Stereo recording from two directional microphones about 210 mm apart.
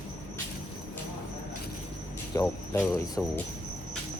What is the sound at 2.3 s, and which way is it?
Speech, 15° left (ahead or behind).